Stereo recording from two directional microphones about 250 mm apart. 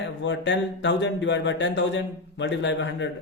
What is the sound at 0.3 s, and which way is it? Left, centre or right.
Speech, left.